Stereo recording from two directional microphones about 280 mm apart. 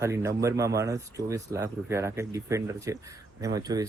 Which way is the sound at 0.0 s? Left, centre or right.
Centre.